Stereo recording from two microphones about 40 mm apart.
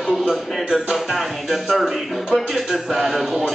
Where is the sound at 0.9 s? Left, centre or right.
Centre.